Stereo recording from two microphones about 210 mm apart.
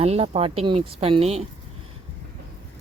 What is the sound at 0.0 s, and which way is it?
Speech, 30° right (ahead or behind).